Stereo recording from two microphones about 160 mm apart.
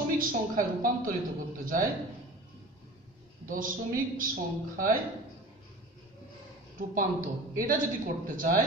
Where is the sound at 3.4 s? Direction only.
55° right (ahead or behind).